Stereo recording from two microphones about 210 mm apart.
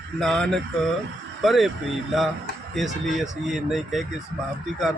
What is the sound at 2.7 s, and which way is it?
Speech, centre (ahead or behind).